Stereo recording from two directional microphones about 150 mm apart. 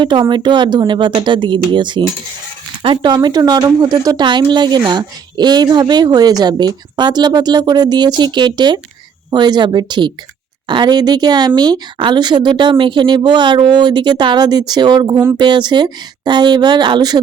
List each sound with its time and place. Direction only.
0.0 s speech: 30° right (ahead or behind)